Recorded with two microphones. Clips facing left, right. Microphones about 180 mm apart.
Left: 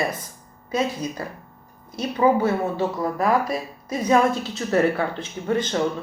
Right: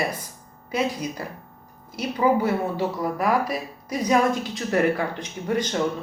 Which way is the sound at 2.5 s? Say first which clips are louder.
Left 1 dB; 25° left (ahead or behind).